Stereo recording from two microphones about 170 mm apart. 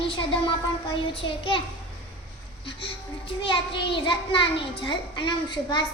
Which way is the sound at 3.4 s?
30° left (ahead or behind).